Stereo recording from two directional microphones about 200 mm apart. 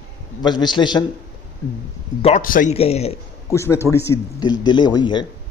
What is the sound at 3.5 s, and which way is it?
A man's voice, 15° left (ahead or behind).